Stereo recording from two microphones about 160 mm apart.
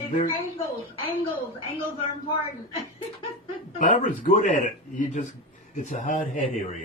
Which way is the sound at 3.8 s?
50° left (ahead or behind).